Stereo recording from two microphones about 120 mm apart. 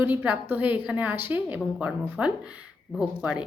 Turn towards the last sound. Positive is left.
turn(degrees=-10)  # may be behind; listen again after turning